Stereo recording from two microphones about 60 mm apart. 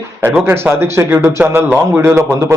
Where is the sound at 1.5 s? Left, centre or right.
Right.